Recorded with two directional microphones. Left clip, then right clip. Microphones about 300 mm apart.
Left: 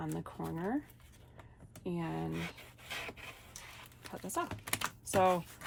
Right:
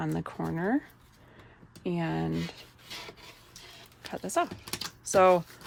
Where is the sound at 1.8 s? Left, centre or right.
Right.